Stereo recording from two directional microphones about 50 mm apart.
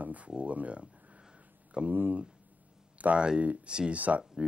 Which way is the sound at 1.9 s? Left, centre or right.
Right.